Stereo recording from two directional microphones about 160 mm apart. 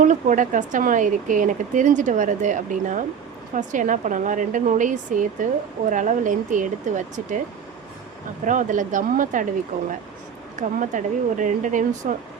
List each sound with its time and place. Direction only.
0.0 s speech: 50° right (ahead or behind)
8.4 s speech: 55° right (ahead or behind)